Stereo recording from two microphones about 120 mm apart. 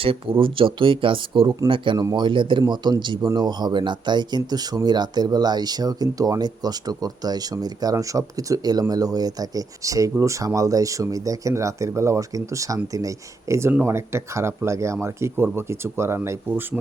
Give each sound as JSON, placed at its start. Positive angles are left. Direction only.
{"t": 0.0, "sound": "speech", "side_deg": -50}